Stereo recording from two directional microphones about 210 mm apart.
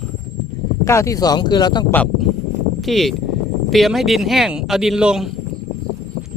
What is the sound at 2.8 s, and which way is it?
Speech, centre (ahead or behind).